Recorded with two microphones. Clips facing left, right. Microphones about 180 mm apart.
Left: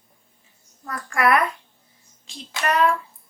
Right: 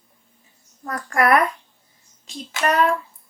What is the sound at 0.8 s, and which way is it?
Speech, 45° right (ahead or behind).